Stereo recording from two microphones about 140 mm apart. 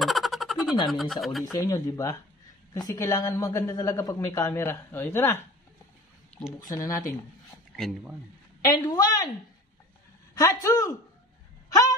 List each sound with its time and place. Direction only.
0.0 s a sound: centre (ahead or behind)
0.8 s speech: centre (ahead or behind)
1.5 s a woman's voice: 25° left (ahead or behind)
6.7 s a woman's voice: 25° left (ahead or behind)
7.7 s speech: centre (ahead or behind)
8.6 s a woman's voice: 25° left (ahead or behind)
10.3 s a woman's voice: 25° left (ahead or behind)